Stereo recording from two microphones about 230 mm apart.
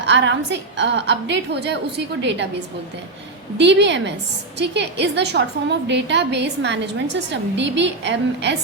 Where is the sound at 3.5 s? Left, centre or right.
Right.